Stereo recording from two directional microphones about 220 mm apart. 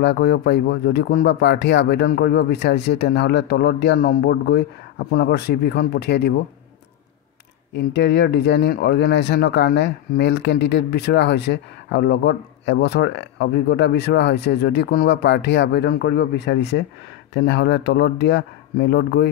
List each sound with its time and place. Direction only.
0.0 s speech: 50° left (ahead or behind)
7.7 s speech: 50° left (ahead or behind)